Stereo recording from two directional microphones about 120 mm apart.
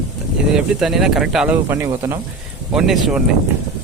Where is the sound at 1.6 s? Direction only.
25° right (ahead or behind).